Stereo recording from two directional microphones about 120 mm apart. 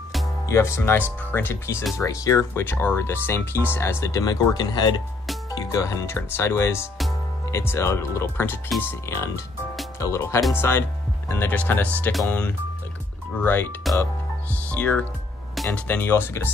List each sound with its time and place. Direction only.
0.5 s speech: 25° left (ahead or behind)
2.6 s speech: 15° left (ahead or behind)
15.5 s music: centre (ahead or behind)
15.9 s speech: 20° left (ahead or behind)